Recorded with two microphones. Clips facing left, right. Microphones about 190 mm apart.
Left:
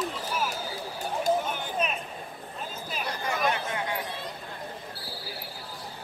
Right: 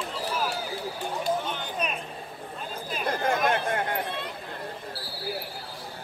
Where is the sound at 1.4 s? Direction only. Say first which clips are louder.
Left 1 dB; 10° left (ahead or behind).